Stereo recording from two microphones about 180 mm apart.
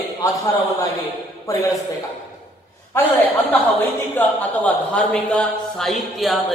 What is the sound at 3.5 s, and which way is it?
A woman's voice, 10° left (ahead or behind).